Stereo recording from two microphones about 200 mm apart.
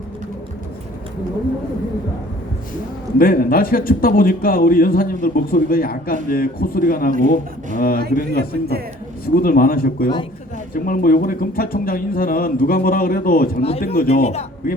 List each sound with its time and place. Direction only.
3.2 s speech: 45° left (ahead or behind)
13.6 s speech: 30° left (ahead or behind)
13.8 s speech: 45° left (ahead or behind)